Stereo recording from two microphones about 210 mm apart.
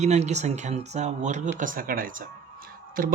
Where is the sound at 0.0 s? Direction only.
35° right (ahead or behind).